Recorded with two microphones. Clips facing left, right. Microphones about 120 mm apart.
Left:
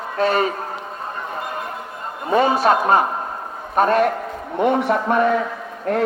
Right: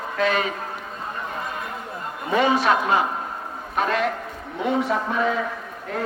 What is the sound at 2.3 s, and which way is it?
A man's voice, 40° left (ahead or behind).